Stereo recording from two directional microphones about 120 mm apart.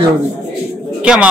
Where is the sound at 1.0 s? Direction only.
10° right (ahead or behind).